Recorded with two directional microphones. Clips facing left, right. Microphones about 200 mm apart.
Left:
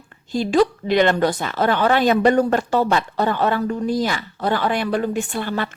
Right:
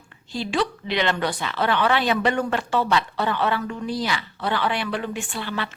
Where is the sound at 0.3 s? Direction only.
45° left (ahead or behind).